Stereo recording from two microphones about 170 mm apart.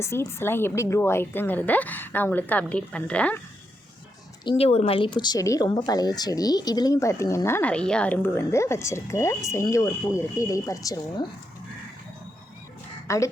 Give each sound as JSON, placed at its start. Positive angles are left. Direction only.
{"t": 0.0, "sound": "a woman's voice", "side_deg": 15}
{"t": 4.4, "sound": "a woman's voice", "side_deg": 35}
{"t": 13.1, "sound": "a woman's voice", "side_deg": 20}